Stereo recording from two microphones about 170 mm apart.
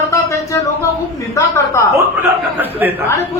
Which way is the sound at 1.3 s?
15° left (ahead or behind).